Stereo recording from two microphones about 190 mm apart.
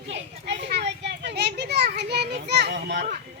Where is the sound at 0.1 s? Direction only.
65° right (ahead or behind).